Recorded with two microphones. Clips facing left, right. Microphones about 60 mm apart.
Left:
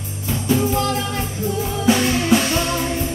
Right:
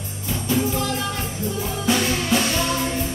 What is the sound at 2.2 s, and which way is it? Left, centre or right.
Music, centre.